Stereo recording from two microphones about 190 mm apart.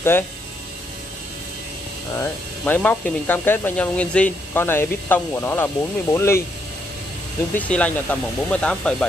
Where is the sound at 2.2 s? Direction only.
10° left (ahead or behind).